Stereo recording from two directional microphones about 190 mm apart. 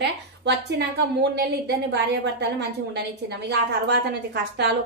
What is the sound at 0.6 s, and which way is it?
A woman's voice, 60° right (ahead or behind).